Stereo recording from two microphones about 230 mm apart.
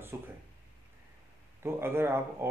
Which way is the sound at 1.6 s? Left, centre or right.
Centre.